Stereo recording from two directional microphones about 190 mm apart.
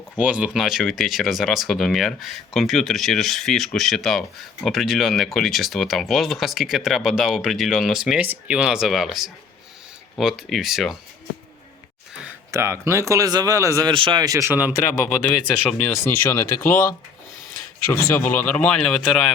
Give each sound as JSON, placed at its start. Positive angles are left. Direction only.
{"t": 0.2, "sound": "speech", "side_deg": -5}
{"t": 12.2, "sound": "speech", "side_deg": -15}
{"t": 15.6, "sound": "speech", "side_deg": 0}
{"t": 16.0, "sound": "speech", "side_deg": 15}
{"t": 18.1, "sound": "speech", "side_deg": 10}